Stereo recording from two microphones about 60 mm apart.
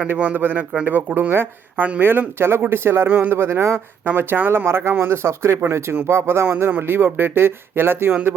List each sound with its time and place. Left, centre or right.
0.2 s speech: right
1.7 s speech: right
2.0 s speech: right
3.1 s speech: right